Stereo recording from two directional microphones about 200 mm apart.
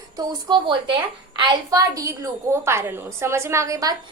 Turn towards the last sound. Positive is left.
turn(degrees=-15)  # may be behind; listen again after turning